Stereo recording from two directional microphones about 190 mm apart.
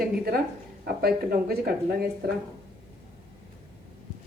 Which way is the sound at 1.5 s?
50° right (ahead or behind).